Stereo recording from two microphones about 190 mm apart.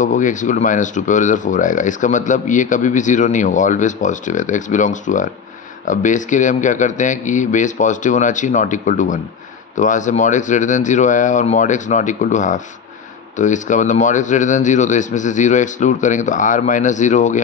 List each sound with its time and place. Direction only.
0.0 s speech: 40° left (ahead or behind)